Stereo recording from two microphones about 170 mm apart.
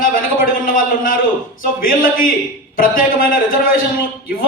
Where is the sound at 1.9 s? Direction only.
55° left (ahead or behind).